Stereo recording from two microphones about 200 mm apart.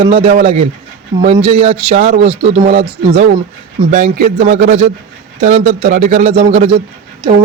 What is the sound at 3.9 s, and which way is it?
Speech, 35° right (ahead or behind).